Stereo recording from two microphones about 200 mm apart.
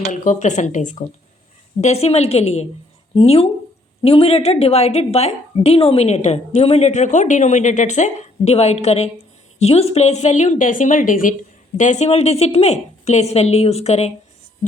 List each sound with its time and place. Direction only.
0.1 s a woman's voice: 35° left (ahead or behind)